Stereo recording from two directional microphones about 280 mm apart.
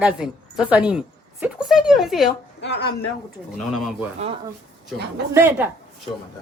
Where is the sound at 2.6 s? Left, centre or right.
Left.